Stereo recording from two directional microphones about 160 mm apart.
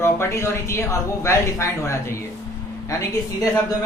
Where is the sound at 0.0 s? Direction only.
15° left (ahead or behind).